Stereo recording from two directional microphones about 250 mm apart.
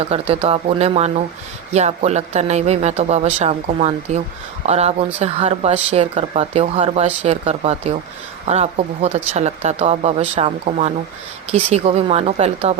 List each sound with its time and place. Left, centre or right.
0.1 s speech: right